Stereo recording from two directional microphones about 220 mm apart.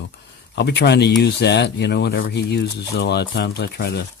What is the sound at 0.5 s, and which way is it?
Speech, 50° left (ahead or behind).